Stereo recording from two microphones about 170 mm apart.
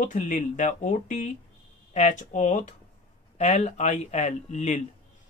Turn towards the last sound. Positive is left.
turn(degrees=45)  # may be behind; listen again after turning